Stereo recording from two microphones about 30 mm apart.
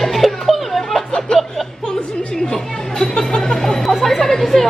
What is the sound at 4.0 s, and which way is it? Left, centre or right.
Chatter, centre.